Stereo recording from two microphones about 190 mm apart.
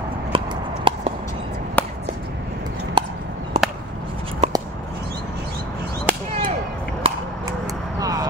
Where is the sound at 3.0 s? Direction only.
25° right (ahead or behind).